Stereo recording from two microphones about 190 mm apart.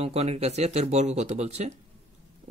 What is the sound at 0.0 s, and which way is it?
Speech, 35° right (ahead or behind).